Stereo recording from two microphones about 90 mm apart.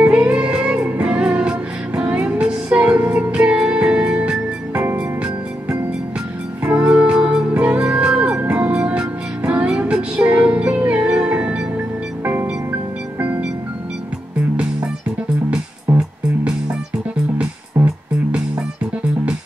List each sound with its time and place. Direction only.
0.0 s music: 15° right (ahead or behind)
17.8 s music: 30° right (ahead or behind)